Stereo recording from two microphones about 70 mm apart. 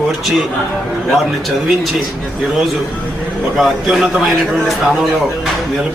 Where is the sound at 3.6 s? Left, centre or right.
Centre.